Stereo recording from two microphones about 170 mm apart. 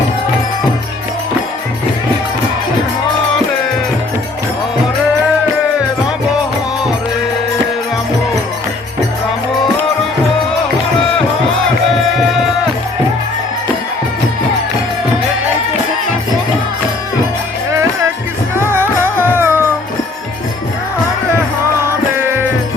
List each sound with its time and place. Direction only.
17.7 s music: 15° right (ahead or behind)
22.2 s music: 15° right (ahead or behind)